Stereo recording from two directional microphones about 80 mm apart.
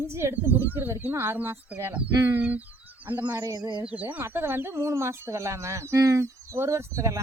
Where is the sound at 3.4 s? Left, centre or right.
Right.